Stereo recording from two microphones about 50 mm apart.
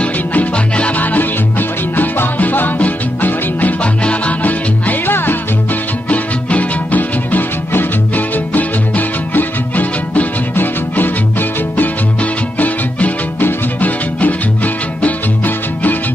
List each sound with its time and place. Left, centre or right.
0.0 s music: left
3.8 s music: left
6.0 s music: left